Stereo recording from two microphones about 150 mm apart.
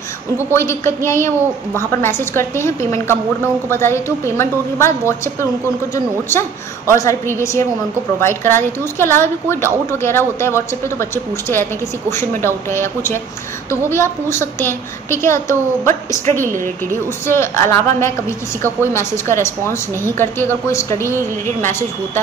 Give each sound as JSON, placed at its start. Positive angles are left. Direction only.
{"t": 0.5, "sound": "a woman's voice", "side_deg": 15}
{"t": 16.3, "sound": "a woman's voice", "side_deg": -60}
{"t": 17.3, "sound": "a woman's voice", "side_deg": 15}